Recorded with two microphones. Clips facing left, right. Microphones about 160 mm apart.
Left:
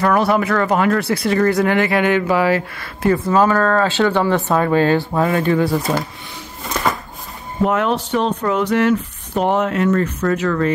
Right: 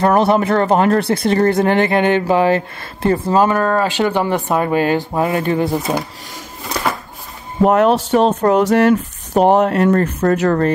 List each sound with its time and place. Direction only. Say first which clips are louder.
0.0 s speech: right 3 dB; 25° right (ahead or behind)
7.6 s speech: right 5 dB; 45° right (ahead or behind)
9.8 s speech: right 3 dB; 50° right (ahead or behind)